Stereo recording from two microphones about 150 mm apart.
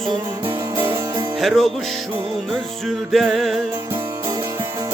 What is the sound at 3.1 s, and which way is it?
Music, centre (ahead or behind).